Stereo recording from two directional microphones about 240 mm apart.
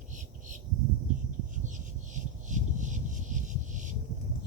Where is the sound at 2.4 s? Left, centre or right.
Right.